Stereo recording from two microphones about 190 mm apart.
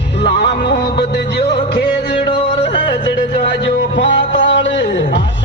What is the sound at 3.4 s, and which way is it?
Music, 65° left (ahead or behind).